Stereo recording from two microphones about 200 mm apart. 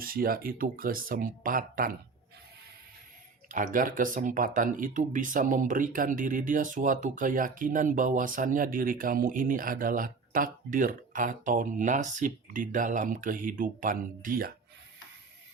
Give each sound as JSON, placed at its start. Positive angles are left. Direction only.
{"t": 0.0, "sound": "speech", "side_deg": -45}
{"t": 3.5, "sound": "speech", "side_deg": -40}